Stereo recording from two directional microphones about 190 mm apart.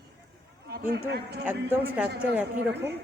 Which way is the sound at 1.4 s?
10° right (ahead or behind).